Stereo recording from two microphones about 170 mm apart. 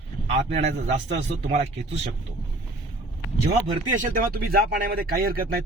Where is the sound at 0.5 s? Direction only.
40° right (ahead or behind).